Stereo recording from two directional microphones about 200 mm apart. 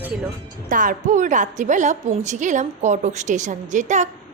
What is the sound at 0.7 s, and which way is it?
A woman's voice, 40° right (ahead or behind).